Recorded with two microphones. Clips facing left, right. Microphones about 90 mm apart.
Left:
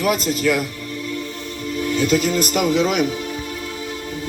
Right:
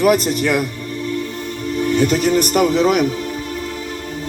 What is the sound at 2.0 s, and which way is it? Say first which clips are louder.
Speech: right 2 dB; 45° right (ahead or behind).